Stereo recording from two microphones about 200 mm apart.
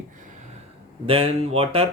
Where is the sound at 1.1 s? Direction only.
30° right (ahead or behind).